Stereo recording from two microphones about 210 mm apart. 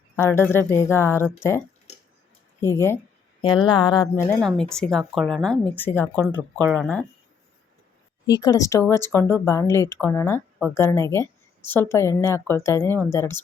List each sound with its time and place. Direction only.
0.2 s speech: 10° left (ahead or behind)
2.6 s speech: 10° left (ahead or behind)
4.1 s speech: 10° left (ahead or behind)
8.3 s speech: 15° left (ahead or behind)